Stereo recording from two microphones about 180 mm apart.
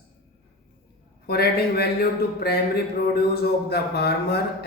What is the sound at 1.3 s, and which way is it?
Speech, 60° left (ahead or behind).